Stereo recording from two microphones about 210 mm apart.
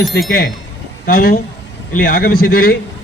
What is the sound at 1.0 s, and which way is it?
A man's voice, 45° left (ahead or behind).